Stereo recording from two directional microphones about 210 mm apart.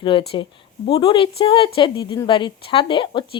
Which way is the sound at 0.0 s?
25° left (ahead or behind).